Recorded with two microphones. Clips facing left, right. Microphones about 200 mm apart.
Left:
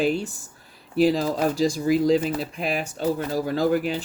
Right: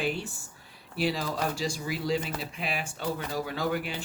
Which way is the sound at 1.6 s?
40° left (ahead or behind).